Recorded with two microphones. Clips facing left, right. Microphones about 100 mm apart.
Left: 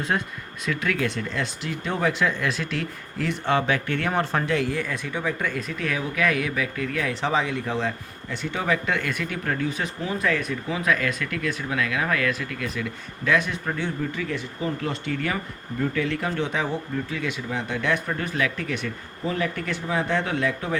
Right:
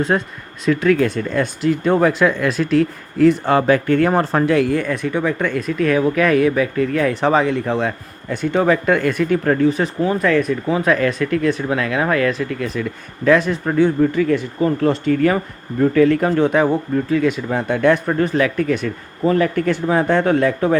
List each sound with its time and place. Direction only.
0.1 s speech: 45° right (ahead or behind)